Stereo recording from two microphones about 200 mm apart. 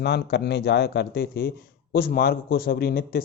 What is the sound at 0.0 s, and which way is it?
A man's voice, 55° left (ahead or behind).